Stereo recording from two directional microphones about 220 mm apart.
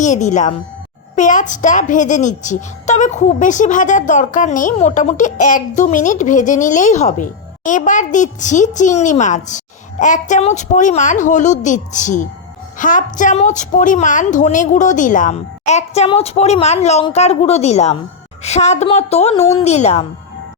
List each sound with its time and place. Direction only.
0.0 s a child's voice: 35° left (ahead or behind)